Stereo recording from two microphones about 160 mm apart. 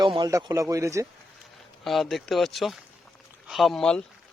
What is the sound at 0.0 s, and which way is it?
Speech, 25° right (ahead or behind).